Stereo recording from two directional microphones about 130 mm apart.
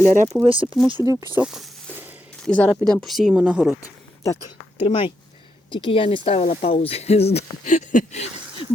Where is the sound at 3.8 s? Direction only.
25° left (ahead or behind).